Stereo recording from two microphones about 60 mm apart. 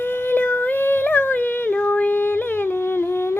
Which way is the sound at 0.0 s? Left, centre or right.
Left.